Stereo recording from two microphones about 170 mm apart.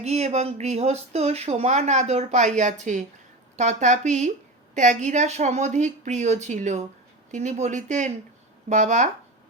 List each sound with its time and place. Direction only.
0.0 s a woman's voice: 40° right (ahead or behind)